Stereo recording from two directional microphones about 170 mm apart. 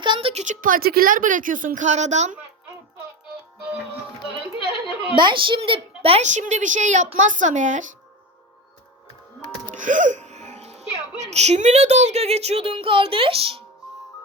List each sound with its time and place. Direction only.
0.0 s a sound: 30° right (ahead or behind)
0.4 s a woman's voice: 50° right (ahead or behind)
5.1 s a woman's voice: 30° right (ahead or behind); by 7.9 s 45° right (ahead or behind)
9.7 s speech: 50° right (ahead or behind); by 13.6 s 35° right (ahead or behind)